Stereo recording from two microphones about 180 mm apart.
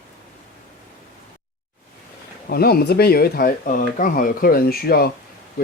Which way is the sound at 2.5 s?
60° left (ahead or behind).